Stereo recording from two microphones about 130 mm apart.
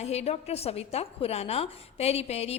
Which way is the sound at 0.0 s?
55° left (ahead or behind).